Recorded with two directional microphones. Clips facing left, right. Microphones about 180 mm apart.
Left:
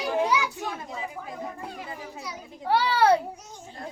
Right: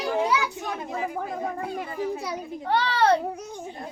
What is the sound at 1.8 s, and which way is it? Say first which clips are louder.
Children playing: right 9 dB; 60° right (ahead or behind).